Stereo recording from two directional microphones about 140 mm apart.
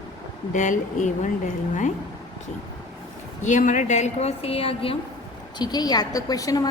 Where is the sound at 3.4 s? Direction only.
60° left (ahead or behind); by 5.0 s 40° left (ahead or behind).